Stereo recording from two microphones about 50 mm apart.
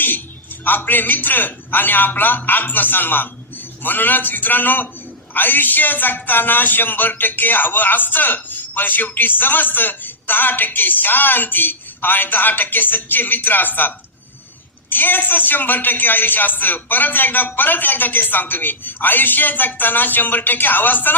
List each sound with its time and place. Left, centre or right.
0.6 s speech: left